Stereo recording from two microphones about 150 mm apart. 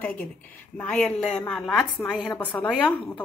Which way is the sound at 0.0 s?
10° left (ahead or behind).